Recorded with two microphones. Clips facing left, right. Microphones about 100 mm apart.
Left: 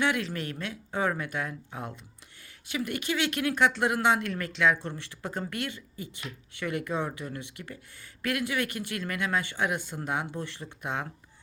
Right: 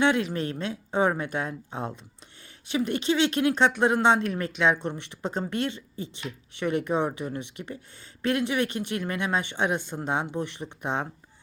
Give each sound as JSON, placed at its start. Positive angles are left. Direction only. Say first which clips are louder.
{"t": 0.0, "sound": "speech", "louder": "right 5 dB", "side_deg": -20}